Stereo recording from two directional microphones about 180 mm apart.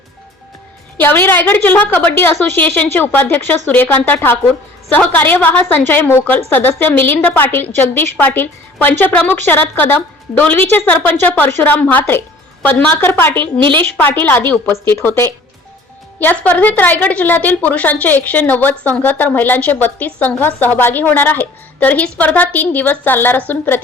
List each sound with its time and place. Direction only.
0.9 s a woman's voice: 10° left (ahead or behind)
13.4 s a woman's voice: 25° right (ahead or behind)
13.9 s a woman's voice: 10° left (ahead or behind)